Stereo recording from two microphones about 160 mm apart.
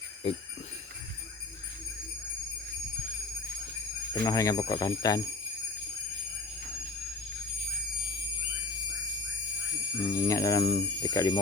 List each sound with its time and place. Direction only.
4.1 s speech: 20° left (ahead or behind)
10.0 s speech: 20° left (ahead or behind)